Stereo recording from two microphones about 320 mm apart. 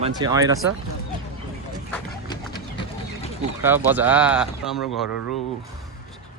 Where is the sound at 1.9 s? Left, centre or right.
Centre.